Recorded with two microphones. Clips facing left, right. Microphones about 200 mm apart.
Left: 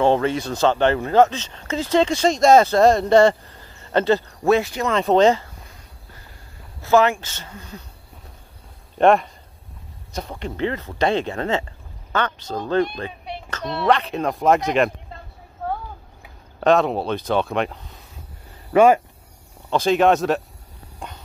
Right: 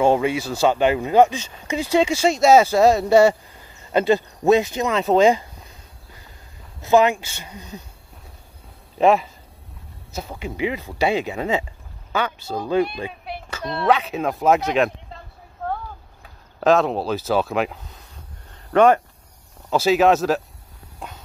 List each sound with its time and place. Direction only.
0.0 s speech: 10° right (ahead or behind)
4.9 s speech: 5° right (ahead or behind)
6.8 s speech: 15° right (ahead or behind)
8.9 s speech: 5° right (ahead or behind)
15.6 s a sound: 5° left (ahead or behind)
16.5 s speech: centre (ahead or behind)
18.5 s a sound: 5° left (ahead or behind)
19.7 s speech: 5° right (ahead or behind)
21.0 s walk: 5° right (ahead or behind)